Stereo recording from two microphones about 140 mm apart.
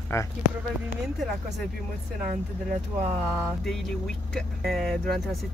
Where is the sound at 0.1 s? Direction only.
20° left (ahead or behind).